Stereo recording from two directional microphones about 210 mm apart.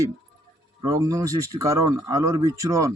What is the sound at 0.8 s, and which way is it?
Speech, 15° right (ahead or behind).